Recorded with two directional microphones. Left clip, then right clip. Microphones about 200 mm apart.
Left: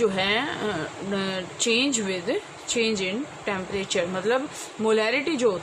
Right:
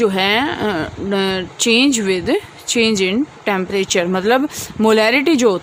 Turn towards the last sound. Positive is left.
turn(degrees=-55)  # may be behind; listen again after turning